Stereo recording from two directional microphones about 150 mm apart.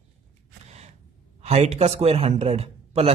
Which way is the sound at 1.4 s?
45° right (ahead or behind).